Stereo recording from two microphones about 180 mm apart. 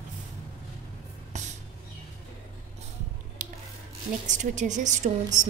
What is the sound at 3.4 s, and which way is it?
Scissors, 45° right (ahead or behind).